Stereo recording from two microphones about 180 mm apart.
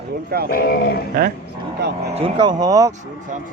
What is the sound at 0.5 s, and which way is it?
Speech, 55° left (ahead or behind).